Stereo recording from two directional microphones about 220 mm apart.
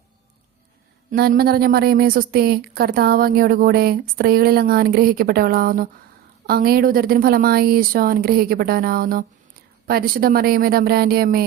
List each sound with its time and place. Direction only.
1.1 s speech: 45° right (ahead or behind)